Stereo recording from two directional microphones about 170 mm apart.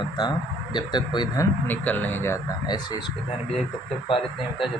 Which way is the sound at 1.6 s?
10° left (ahead or behind).